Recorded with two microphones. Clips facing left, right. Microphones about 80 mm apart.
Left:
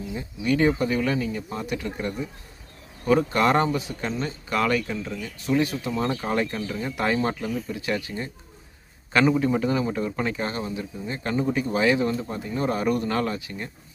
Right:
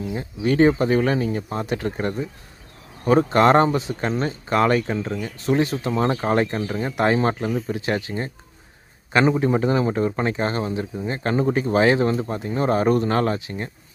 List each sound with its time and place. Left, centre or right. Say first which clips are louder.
0.0 s speech: right 5 dB; right
3.1 s speech: right 5 dB; right
9.4 s speech: right 3 dB; right